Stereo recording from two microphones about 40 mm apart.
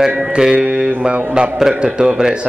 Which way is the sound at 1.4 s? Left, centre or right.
Right.